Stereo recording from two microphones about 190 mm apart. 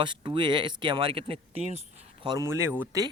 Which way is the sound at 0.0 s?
25° right (ahead or behind).